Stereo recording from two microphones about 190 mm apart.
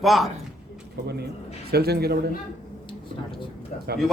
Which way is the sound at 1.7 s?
55° right (ahead or behind).